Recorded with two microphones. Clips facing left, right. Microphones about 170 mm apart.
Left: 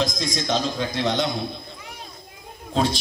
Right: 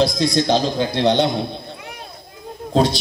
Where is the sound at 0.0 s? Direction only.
35° right (ahead or behind).